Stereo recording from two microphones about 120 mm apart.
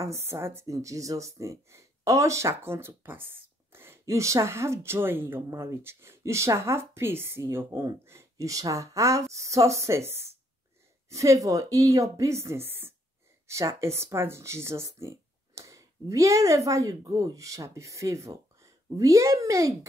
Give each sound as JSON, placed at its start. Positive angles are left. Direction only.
{"t": 0.0, "sound": "a woman's voice", "side_deg": -25}